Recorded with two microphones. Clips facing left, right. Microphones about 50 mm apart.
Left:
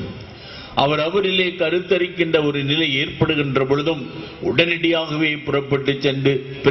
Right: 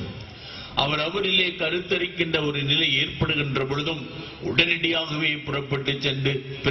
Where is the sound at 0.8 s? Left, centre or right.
Centre.